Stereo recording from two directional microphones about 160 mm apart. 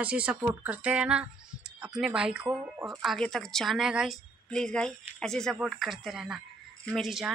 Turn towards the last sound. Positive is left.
turn(degrees=0)  # may be behind; listen again after turning